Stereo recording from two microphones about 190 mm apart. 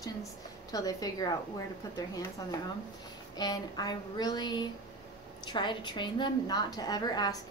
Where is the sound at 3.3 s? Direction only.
20° left (ahead or behind).